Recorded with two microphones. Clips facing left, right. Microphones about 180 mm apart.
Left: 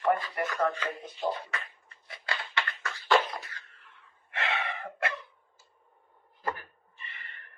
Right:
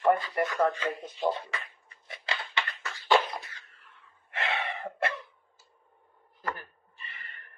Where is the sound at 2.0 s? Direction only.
20° right (ahead or behind).